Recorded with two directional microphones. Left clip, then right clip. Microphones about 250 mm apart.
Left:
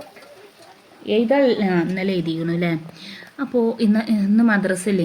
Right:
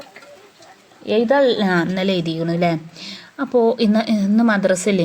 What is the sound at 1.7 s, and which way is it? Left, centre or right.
A woman's voice, right.